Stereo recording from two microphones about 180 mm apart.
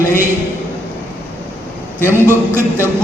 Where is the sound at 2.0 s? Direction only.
10° right (ahead or behind).